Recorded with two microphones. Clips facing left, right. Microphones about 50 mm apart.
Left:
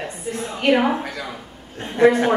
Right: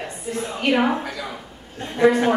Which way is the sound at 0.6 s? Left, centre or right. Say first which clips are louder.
Left 2 dB; centre.